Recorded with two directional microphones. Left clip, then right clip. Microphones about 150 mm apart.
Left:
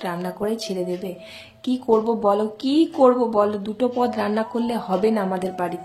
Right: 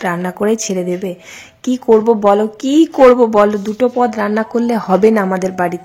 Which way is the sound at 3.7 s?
30° right (ahead or behind).